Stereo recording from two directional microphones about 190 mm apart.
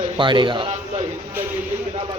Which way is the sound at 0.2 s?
25° right (ahead or behind).